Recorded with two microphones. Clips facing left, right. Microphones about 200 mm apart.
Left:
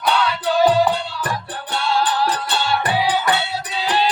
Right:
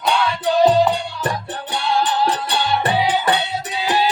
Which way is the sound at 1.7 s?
15° right (ahead or behind).